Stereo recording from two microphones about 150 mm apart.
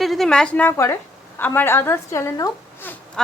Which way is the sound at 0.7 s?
20° left (ahead or behind).